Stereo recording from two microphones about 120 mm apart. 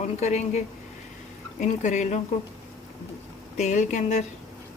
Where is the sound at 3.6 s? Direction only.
85° left.